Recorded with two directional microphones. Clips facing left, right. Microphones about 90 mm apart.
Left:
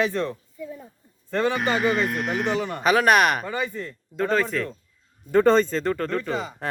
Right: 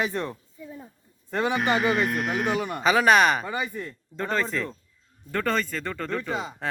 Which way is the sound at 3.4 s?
15° right (ahead or behind).